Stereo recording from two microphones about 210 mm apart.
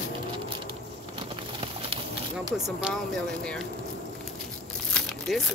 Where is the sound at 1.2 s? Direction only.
25° right (ahead or behind).